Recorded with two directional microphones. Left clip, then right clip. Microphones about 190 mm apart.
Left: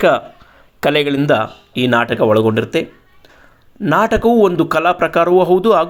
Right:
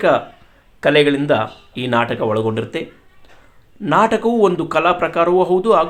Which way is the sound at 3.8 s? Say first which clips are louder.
Left 2 dB; 30° left (ahead or behind).